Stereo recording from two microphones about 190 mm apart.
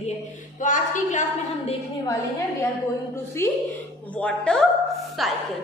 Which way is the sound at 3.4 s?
15° left (ahead or behind).